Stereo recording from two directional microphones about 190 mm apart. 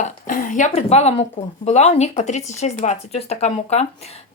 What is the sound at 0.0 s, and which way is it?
Speech, 45° left (ahead or behind).